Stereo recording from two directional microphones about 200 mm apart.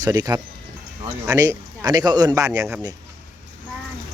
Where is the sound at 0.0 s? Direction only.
20° right (ahead or behind).